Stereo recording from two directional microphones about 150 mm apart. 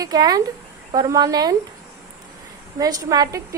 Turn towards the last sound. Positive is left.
turn(degrees=-20)  # may be behind; listen again after turning